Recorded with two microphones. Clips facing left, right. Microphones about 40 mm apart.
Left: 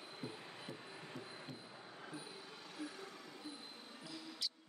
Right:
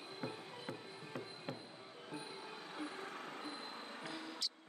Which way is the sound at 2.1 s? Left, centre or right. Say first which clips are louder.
Right 5 dB; right.